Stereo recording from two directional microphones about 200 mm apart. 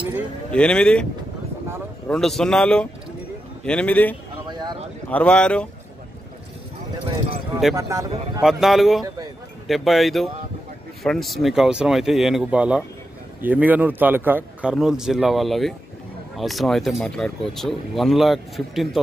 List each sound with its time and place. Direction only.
0.5 s speech: 5° left (ahead or behind)
2.0 s a man's voice: centre (ahead or behind)
4.5 s a sound: 20° right (ahead or behind)
5.1 s speech: 5° left (ahead or behind)
7.7 s speech: 15° right (ahead or behind)
8.4 s speech: centre (ahead or behind)